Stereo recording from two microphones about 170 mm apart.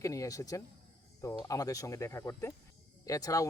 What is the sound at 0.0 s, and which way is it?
Speech, 20° left (ahead or behind).